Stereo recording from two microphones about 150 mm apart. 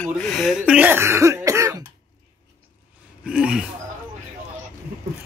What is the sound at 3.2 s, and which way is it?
Speech, 5° right (ahead or behind).